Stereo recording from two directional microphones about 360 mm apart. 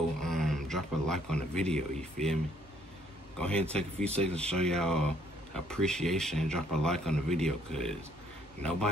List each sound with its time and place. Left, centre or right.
0.2 s speech: centre
3.3 s speech: centre